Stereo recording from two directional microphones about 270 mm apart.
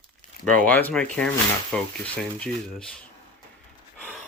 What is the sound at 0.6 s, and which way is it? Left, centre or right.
Speech, centre.